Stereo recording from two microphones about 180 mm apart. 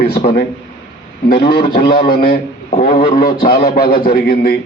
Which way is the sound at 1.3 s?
60° left (ahead or behind).